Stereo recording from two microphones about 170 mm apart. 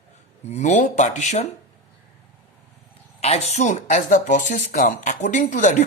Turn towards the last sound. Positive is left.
turn(degrees=45)  # may be behind; listen again after turning